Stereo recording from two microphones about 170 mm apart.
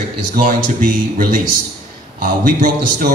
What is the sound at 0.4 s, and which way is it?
Speech, 55° right (ahead or behind).